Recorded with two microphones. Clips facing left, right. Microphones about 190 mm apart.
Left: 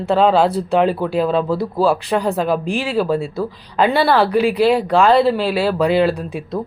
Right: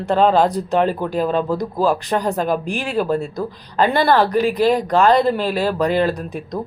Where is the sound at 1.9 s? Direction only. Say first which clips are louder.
Even; 10° left (ahead or behind).